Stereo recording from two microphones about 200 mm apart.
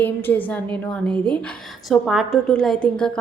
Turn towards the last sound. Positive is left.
turn(degrees=5)  # may be behind; listen again after turning